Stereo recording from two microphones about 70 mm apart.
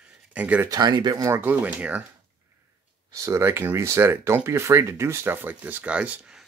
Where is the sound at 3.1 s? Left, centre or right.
Right.